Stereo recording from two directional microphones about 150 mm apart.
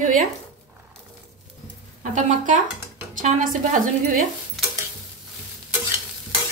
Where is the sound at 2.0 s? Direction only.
55° right (ahead or behind).